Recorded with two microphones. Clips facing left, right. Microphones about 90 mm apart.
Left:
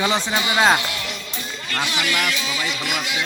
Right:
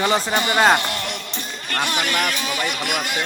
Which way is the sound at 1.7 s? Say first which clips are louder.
Right 1 dB; 45° right (ahead or behind).